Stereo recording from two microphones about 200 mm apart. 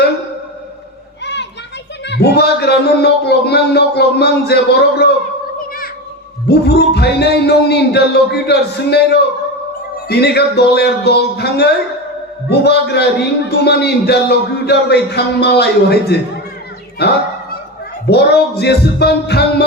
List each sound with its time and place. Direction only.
1.2 s children playing: 60° left (ahead or behind)
2.0 s a man's voice: 55° left (ahead or behind)
6.5 s a man's voice: 55° left (ahead or behind)